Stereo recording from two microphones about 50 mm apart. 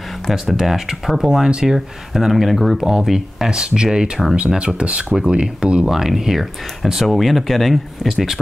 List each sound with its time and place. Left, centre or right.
0.3 s speech: centre
5.9 s speech: centre